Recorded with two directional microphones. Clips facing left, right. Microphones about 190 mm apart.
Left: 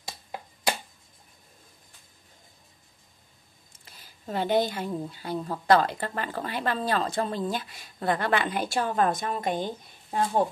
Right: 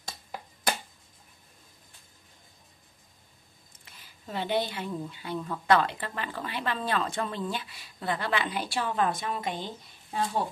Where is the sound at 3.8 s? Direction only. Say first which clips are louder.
Left 5 dB; 45° left (ahead or behind).